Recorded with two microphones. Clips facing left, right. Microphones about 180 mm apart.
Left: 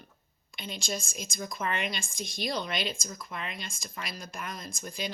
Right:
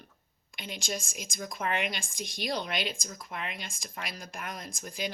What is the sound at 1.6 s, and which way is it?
Speech, 60° right (ahead or behind).